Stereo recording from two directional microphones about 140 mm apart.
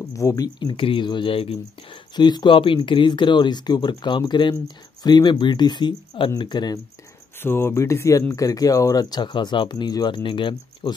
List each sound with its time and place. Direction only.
0.2 s speech: 20° left (ahead or behind)
0.6 s speech: 35° left (ahead or behind)
7.3 s speech: 15° left (ahead or behind); by 10.9 s 35° left (ahead or behind)